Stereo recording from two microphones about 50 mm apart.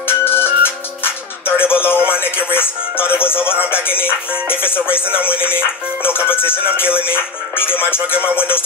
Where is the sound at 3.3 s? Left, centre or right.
Left.